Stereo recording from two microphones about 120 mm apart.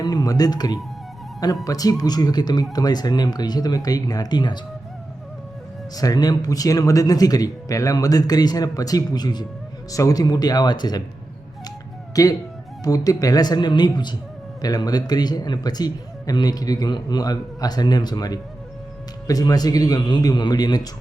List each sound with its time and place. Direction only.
0.0 s a man's voice: 30° left (ahead or behind)
6.0 s a man's voice: 30° left (ahead or behind)
12.2 s a man's voice: 30° left (ahead or behind)